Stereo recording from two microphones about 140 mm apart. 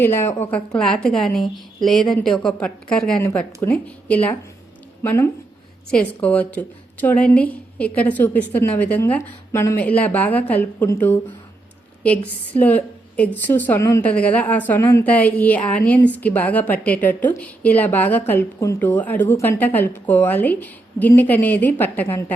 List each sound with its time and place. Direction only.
0.0 s a woman's voice: 15° left (ahead or behind)
3.2 s a woman's voice: 15° left (ahead or behind)
12.0 s a woman's voice: 10° left (ahead or behind)